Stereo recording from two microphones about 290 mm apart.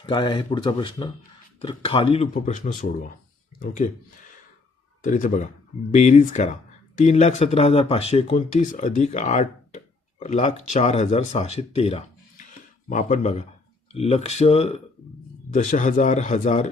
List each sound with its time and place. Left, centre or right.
0.0 s speech: centre
5.0 s speech: left